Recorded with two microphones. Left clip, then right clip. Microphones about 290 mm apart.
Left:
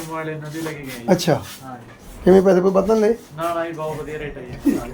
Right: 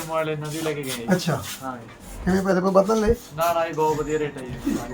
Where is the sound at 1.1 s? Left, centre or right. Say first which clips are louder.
Left 8 dB; centre.